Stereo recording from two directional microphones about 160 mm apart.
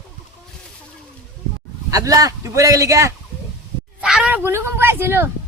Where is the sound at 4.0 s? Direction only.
5° right (ahead or behind).